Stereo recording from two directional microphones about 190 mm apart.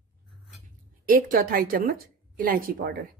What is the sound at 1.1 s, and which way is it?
A woman's voice, 45° right (ahead or behind).